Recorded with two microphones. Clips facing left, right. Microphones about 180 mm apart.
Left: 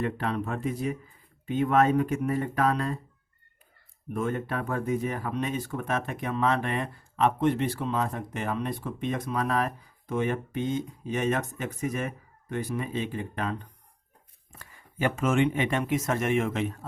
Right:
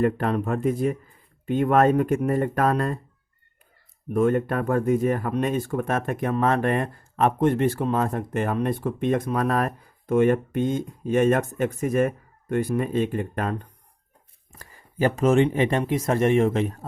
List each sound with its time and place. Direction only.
0.0 s speech: 50° right (ahead or behind)
4.1 s speech: 50° right (ahead or behind)
14.6 s speech: 35° right (ahead or behind)